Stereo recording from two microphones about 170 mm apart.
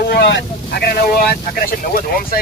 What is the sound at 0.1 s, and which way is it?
Speech, 90° left.